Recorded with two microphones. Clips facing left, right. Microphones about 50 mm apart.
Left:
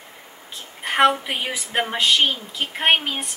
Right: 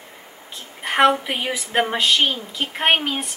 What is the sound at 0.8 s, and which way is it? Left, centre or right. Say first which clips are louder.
Speech: right 1 dB; centre.